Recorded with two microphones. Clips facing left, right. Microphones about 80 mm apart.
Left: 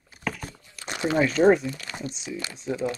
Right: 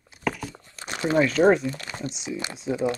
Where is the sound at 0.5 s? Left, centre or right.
Right.